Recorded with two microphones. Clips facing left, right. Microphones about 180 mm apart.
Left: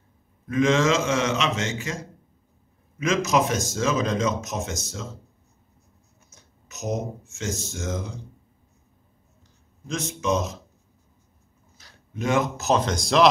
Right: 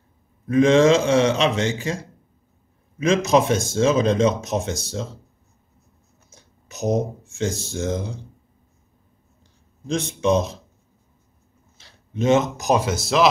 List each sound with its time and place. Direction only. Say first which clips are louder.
0.5 s a man's voice: right 6 dB; 35° right (ahead or behind)
3.0 s speech: right 4 dB; 30° right (ahead or behind)
6.3 s speech: right 5 dB; 30° right (ahead or behind)
9.8 s a man's voice: right 5 dB; 30° right (ahead or behind)
11.8 s a man's voice: right 6 dB; 25° right (ahead or behind); by 13.3 s 5° right (ahead or behind)